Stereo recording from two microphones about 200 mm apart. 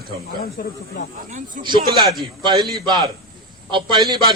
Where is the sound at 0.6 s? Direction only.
55° left (ahead or behind).